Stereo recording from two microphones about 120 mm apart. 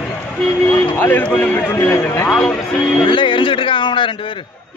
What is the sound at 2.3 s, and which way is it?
Speech, 5° left (ahead or behind).